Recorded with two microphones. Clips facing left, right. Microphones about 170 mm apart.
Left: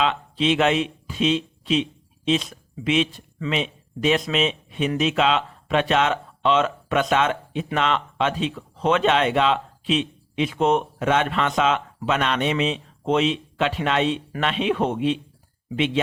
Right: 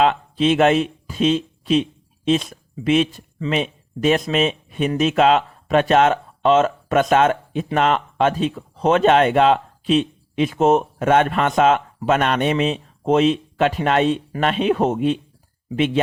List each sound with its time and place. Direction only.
0.0 s speech: 45° right (ahead or behind)